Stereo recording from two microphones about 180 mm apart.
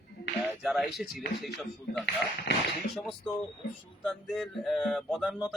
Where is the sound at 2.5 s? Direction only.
70° left (ahead or behind).